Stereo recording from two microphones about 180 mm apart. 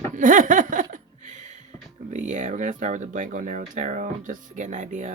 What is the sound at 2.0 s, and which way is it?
Speech, 45° right (ahead or behind).